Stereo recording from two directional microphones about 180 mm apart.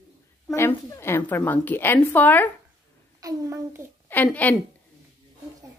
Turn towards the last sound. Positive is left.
turn(degrees=10)  # may be behind; listen again after turning